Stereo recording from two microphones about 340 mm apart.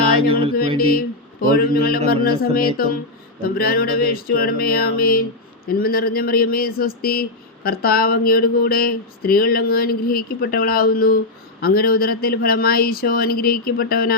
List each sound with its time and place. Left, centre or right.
0.8 s speech: left